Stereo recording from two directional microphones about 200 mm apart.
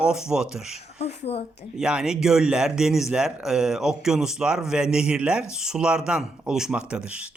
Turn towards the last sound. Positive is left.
turn(degrees=-5)  # may be behind; listen again after turning